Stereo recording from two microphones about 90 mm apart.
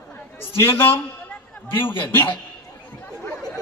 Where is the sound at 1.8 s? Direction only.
65° left (ahead or behind).